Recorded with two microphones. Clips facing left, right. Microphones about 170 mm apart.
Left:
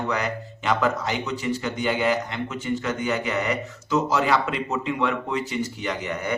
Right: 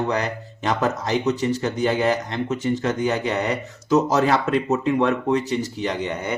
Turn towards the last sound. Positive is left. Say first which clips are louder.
# right 2 dB
turn(degrees=-25)  # may be behind; listen again after turning